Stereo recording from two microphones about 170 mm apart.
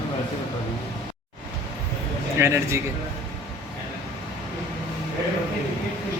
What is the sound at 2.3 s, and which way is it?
Speech, 15° right (ahead or behind).